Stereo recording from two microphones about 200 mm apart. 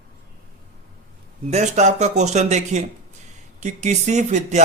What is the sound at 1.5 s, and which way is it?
A man's voice, 35° right (ahead or behind).